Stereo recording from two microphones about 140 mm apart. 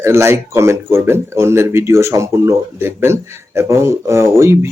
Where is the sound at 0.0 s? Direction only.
20° right (ahead or behind).